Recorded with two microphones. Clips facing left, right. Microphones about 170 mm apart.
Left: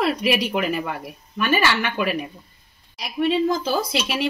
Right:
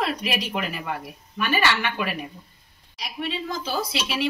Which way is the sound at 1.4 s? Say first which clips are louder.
Left 3 dB; 45° left (ahead or behind).